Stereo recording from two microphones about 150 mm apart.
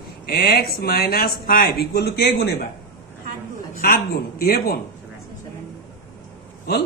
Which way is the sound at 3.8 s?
90° left.